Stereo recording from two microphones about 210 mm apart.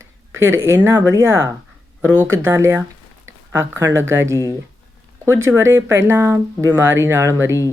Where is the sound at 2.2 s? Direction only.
75° right (ahead or behind).